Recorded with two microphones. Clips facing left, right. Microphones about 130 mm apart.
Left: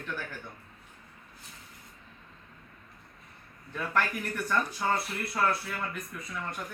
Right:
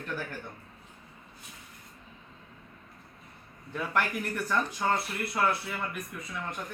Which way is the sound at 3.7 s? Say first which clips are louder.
Even; 5° right (ahead or behind).